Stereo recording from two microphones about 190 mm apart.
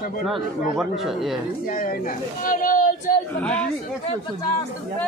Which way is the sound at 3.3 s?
5° left (ahead or behind).